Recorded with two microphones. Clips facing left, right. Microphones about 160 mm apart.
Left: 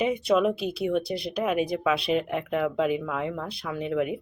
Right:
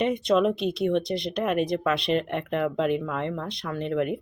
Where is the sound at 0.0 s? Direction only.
5° left (ahead or behind).